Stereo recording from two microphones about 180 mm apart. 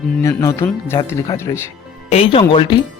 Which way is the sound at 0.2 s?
15° left (ahead or behind).